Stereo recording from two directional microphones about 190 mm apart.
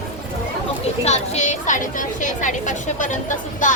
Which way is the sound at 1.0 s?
35° left (ahead or behind).